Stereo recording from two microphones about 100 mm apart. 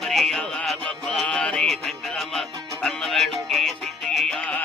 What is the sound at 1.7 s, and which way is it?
Music, centre (ahead or behind).